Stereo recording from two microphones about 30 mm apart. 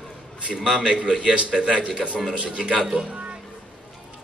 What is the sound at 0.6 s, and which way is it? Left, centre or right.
A man's voice, right.